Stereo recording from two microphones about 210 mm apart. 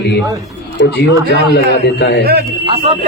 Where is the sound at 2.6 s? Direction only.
25° right (ahead or behind).